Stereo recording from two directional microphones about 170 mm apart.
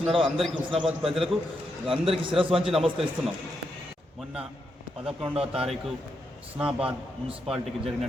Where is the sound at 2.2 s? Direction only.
30° right (ahead or behind).